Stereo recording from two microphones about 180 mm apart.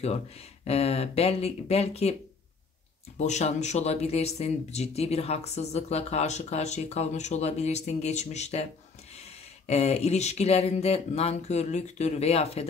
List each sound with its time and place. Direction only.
0.7 s speech: 35° left (ahead or behind)
3.2 s speech: 40° left (ahead or behind)